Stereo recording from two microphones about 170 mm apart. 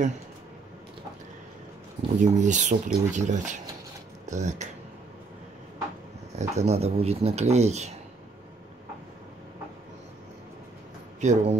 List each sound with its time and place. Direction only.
2.1 s speech: 45° right (ahead or behind)
6.3 s speech: 40° right (ahead or behind)
11.1 s speech: 45° right (ahead or behind)